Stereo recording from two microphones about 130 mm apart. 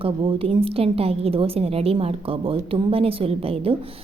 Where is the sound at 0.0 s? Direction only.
45° right (ahead or behind).